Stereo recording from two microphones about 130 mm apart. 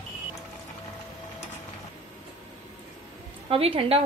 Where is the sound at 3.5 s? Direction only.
50° right (ahead or behind).